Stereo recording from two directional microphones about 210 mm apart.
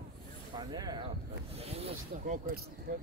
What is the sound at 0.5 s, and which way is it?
A man's voice, 20° right (ahead or behind).